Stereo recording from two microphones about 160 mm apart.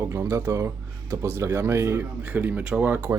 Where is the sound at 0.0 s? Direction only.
15° right (ahead or behind).